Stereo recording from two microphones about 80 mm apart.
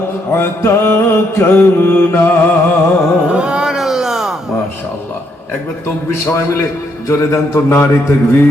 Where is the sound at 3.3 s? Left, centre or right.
Centre.